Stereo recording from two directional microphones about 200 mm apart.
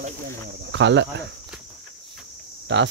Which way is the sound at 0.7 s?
65° right (ahead or behind).